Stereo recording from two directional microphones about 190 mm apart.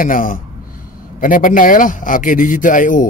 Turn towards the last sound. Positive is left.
turn(degrees=45)  # may be behind; listen again after turning